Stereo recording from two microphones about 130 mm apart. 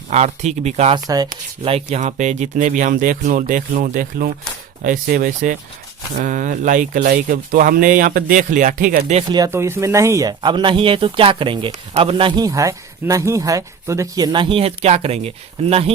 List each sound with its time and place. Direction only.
0.1 s speech: 55° right (ahead or behind)
0.9 s speech: 30° right (ahead or behind)
1.9 s speech: 70° right (ahead or behind); by 9.1 s 85° right
9.5 s speech: 20° right (ahead or behind); by 12.4 s 40° right (ahead or behind)
12.4 s speech: 25° right (ahead or behind)
14.3 s speech: 45° right (ahead or behind)